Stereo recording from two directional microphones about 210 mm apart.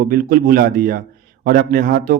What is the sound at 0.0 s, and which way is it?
A man's voice, 45° right (ahead or behind).